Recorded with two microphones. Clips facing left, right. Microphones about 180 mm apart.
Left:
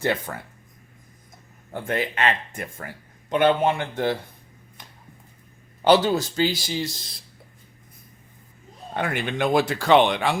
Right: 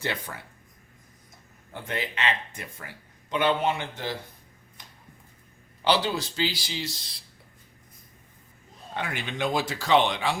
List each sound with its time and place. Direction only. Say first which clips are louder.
0.0 s speech: left 7 dB; 50° left (ahead or behind)
1.7 s speech: left 6 dB; 50° left (ahead or behind)
4.8 s a sound: left 4 dB; 60° left (ahead or behind)
5.8 s speech: left 7 dB; 45° left (ahead or behind)
9.0 s speech: left 6 dB; 55° left (ahead or behind)